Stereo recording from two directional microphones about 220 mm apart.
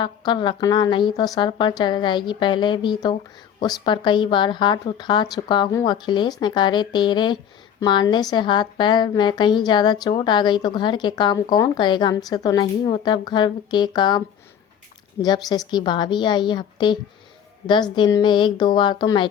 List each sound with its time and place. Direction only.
0.0 s speech: 20° left (ahead or behind)
15.2 s speech: 20° left (ahead or behind)